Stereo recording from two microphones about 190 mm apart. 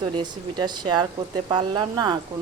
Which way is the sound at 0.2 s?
25° right (ahead or behind).